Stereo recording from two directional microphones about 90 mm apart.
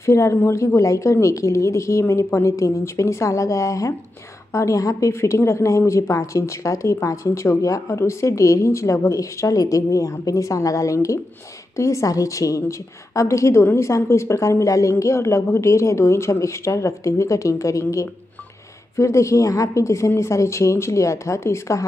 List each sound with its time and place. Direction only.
0.0 s speech: 35° left (ahead or behind)